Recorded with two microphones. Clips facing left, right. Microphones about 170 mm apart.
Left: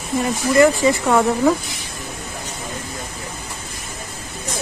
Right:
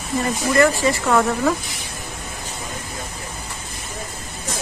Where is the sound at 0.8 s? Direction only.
20° left (ahead or behind).